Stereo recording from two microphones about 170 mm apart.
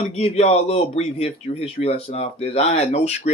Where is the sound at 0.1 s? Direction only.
35° left (ahead or behind).